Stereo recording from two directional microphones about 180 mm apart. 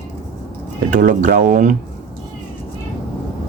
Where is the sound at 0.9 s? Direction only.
45° right (ahead or behind).